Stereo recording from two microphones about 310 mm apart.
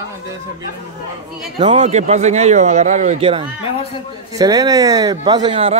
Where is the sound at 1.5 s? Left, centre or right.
Right.